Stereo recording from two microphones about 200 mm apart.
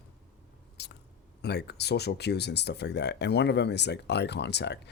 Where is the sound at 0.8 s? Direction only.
55° left (ahead or behind).